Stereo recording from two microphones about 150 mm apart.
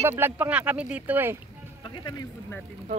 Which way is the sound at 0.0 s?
15° right (ahead or behind).